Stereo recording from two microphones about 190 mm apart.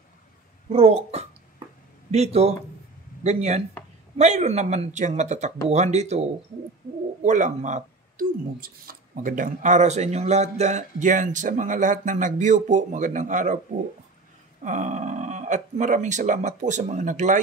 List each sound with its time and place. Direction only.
0.7 s speech: 35° right (ahead or behind)
7.2 s speech: 40° right (ahead or behind)
14.6 s speech: 40° right (ahead or behind)